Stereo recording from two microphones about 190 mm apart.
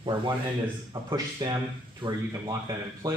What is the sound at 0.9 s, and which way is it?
Speech, 20° right (ahead or behind).